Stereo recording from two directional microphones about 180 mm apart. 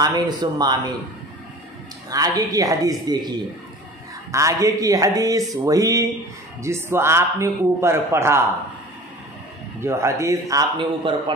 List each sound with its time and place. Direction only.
0.0 s speech: 25° right (ahead or behind)
2.0 s speech: 20° right (ahead or behind)
9.8 s speech: 15° right (ahead or behind)